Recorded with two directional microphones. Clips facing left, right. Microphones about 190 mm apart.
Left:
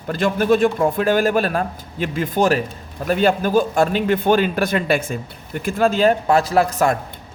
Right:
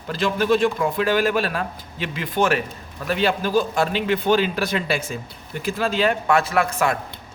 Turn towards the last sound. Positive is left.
turn(degrees=40)  # may be behind; listen again after turning